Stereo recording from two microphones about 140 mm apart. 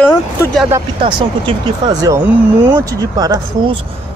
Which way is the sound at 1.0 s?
35° right (ahead or behind).